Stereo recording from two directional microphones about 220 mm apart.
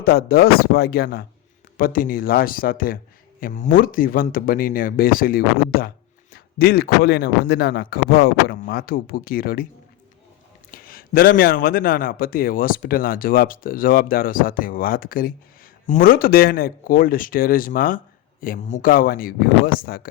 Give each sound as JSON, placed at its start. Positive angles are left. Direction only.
{"t": 0.0, "sound": "speech", "side_deg": 45}
{"t": 10.7, "sound": "speech", "side_deg": 40}